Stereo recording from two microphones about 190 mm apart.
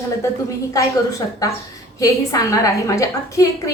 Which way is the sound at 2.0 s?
15° left (ahead or behind).